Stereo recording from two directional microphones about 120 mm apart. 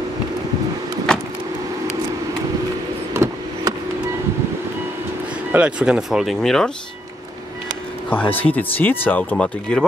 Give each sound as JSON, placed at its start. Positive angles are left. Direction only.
{"t": 1.1, "sound": "vehicle", "side_deg": 5}
{"t": 3.1, "sound": "a sound", "side_deg": -25}
{"t": 5.5, "sound": "speech", "side_deg": -10}
{"t": 8.1, "sound": "speech", "side_deg": 15}